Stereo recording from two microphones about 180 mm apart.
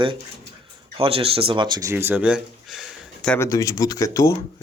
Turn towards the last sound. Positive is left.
turn(degrees=15)  # may be behind; listen again after turning